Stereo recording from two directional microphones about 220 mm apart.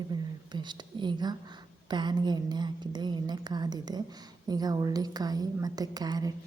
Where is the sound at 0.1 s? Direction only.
20° right (ahead or behind).